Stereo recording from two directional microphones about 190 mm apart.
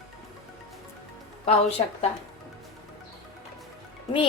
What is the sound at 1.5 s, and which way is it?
Speech, 30° left (ahead or behind).